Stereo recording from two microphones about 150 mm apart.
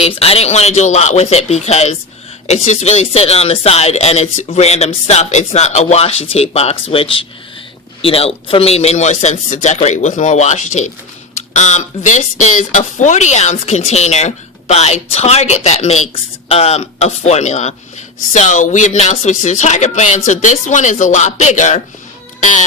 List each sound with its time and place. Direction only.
0.0 s speech: 40° left (ahead or behind)